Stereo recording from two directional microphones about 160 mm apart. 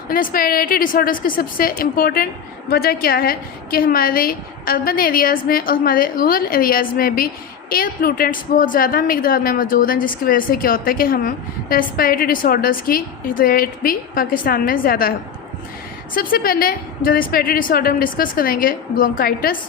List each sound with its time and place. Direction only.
0.1 s a woman's voice: 60° left (ahead or behind)
16.1 s a woman's voice: 65° left (ahead or behind)